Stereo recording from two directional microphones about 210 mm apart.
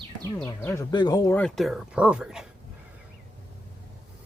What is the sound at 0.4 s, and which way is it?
Speech, 15° left (ahead or behind).